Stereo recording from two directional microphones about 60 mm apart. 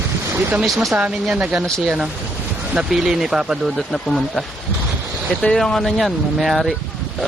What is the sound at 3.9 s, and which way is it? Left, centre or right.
Speech, centre.